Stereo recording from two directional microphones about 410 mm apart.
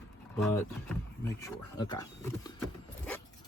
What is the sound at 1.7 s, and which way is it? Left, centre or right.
Speech, centre.